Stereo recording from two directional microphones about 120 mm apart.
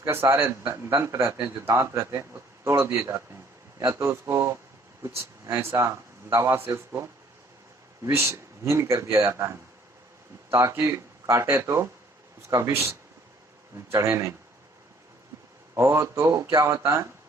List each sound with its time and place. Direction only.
0.0 s speech: 20° right (ahead or behind)
15.7 s speech: 25° right (ahead or behind)